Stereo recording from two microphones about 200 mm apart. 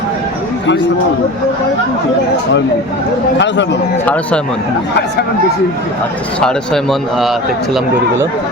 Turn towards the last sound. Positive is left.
turn(degrees=0)  # may be behind; listen again after turning